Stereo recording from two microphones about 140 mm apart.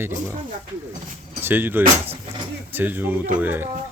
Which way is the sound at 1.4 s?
15° right (ahead or behind).